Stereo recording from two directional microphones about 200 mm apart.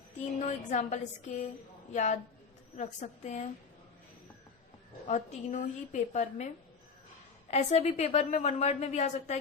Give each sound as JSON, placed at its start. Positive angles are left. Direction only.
{"t": 0.3, "sound": "a woman's voice", "side_deg": 35}
{"t": 5.0, "sound": "a woman's voice", "side_deg": 35}